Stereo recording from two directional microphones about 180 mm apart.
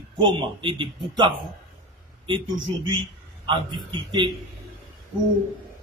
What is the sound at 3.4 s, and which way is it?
Speech, 25° right (ahead or behind).